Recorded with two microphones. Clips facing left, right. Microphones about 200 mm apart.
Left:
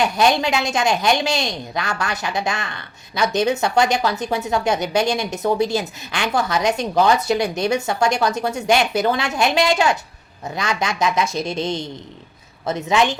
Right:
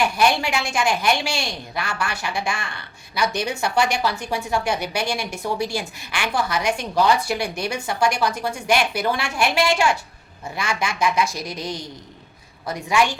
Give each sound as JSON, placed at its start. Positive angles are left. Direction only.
{"t": 0.7, "sound": "a woman's voice", "side_deg": 20}